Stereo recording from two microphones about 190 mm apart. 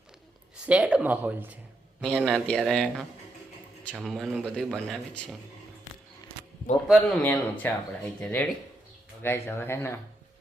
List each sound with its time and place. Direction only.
0.5 s speech: 5° right (ahead or behind)
6.8 s speech: centre (ahead or behind)